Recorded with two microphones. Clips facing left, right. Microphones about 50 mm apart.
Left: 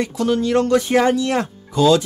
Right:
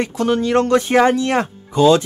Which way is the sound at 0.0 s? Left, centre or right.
Right.